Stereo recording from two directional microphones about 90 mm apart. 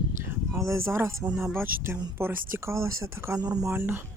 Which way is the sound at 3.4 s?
45° right (ahead or behind).